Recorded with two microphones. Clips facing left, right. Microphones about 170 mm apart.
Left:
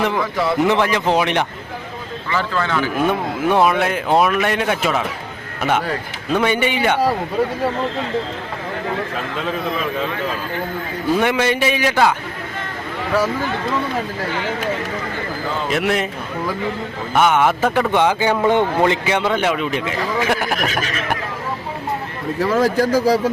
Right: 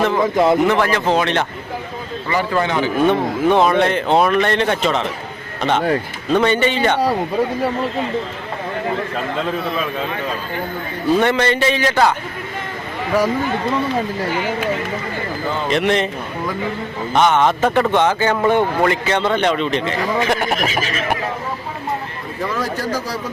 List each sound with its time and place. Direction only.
0.2 s a man's voice: 20° right (ahead or behind)
0.7 s speech: 15° left (ahead or behind)
2.3 s a man's voice: 15° right (ahead or behind)
3.1 s speech: 5° left (ahead or behind)
6.3 s speech: 10° left (ahead or behind)
11.2 s speech: 10° left (ahead or behind)
13.1 s speech: 15° right (ahead or behind)
15.7 s a man's voice: 5° left (ahead or behind)
17.2 s speech: 10° left (ahead or behind)
22.4 s speech: 90° left